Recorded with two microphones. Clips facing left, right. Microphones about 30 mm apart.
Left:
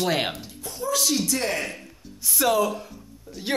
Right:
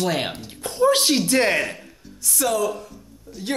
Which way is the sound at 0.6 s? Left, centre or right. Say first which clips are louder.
Right 8 dB; right.